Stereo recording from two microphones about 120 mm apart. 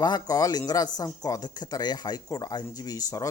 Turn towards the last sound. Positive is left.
turn(degrees=30)  # may be behind; listen again after turning